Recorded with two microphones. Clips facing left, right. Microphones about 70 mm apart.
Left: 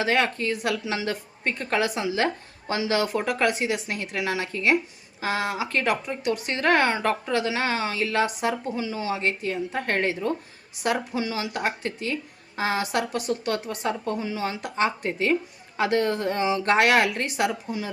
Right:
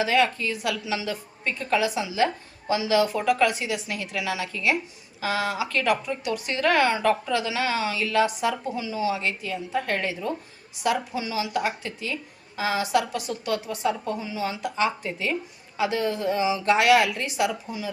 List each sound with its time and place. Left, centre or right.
0.0 s speech: left